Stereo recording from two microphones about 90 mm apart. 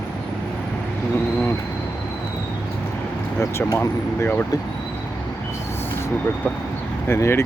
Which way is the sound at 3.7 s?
30° left (ahead or behind).